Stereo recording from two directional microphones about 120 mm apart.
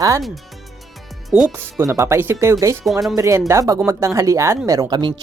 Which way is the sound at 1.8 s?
25° right (ahead or behind).